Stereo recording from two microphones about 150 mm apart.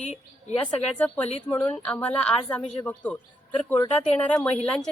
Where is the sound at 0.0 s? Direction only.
50° left (ahead or behind).